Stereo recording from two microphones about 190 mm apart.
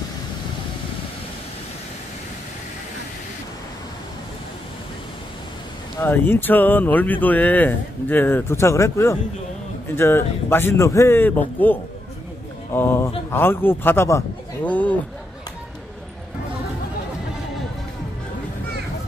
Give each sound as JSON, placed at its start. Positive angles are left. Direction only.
{"t": 5.9, "sound": "a man's voice", "side_deg": 10}